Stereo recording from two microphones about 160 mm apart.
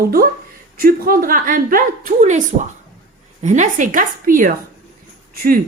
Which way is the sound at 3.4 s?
50° right (ahead or behind).